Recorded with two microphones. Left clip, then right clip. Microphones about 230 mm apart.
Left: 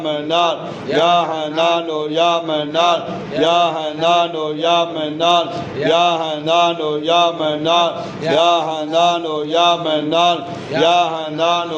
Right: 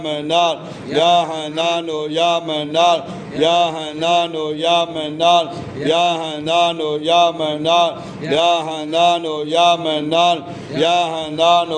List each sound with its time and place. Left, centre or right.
0.1 s mantra: right